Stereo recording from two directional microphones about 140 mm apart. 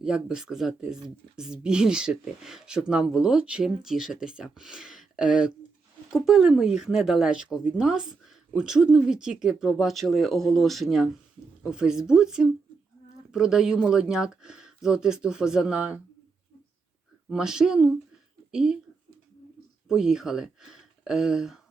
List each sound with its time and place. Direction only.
0.0 s speech: 5° right (ahead or behind)
17.2 s speech: 5° right (ahead or behind)
19.9 s speech: 5° right (ahead or behind)